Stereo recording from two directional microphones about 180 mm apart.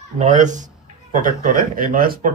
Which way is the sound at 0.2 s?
40° right (ahead or behind).